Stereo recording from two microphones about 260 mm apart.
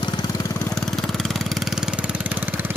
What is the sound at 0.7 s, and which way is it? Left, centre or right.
Vehicle, centre.